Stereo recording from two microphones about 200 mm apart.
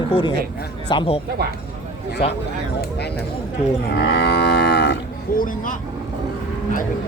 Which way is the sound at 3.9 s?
55° left (ahead or behind).